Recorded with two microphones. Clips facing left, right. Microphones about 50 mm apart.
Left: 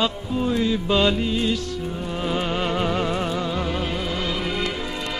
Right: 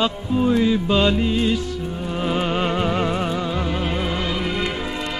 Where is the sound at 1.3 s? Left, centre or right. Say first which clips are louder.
Right 3 dB; centre.